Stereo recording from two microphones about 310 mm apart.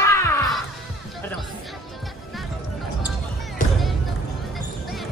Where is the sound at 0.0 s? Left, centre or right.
Centre.